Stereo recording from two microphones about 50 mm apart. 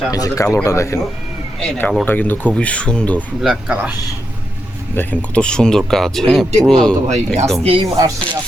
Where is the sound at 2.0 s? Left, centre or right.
Left.